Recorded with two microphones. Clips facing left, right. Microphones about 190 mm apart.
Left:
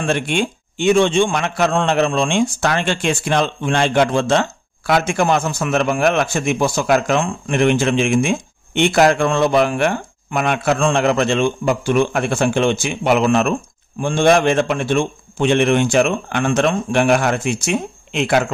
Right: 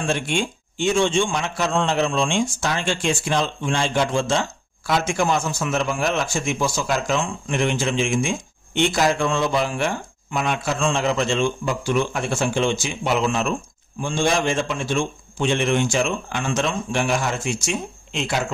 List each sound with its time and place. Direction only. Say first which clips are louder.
0.0 s a man's voice: left 4 dB; 60° left (ahead or behind)